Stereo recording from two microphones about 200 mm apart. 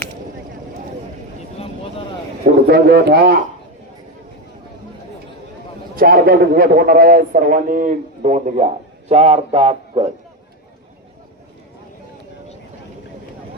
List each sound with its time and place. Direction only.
2.6 s speech: 55° right (ahead or behind)
6.0 s a man's voice: 45° right (ahead or behind); by 10.1 s 30° right (ahead or behind)